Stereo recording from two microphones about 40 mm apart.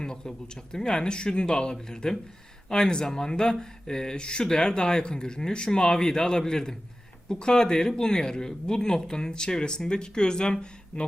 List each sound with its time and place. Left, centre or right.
0.0 s speech: centre